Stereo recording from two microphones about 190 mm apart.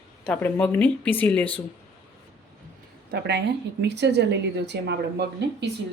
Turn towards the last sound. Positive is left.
turn(degrees=-60)  # may be behind; listen again after turning